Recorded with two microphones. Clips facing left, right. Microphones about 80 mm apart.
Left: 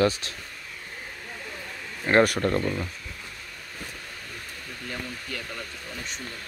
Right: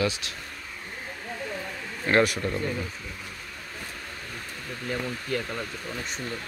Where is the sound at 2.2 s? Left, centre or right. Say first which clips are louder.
Left 3 dB; left.